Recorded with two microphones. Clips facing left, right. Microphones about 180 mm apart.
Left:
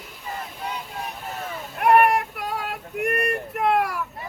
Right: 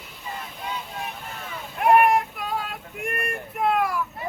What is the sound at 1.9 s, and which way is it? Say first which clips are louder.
Child singing: even; 65° left (ahead or behind).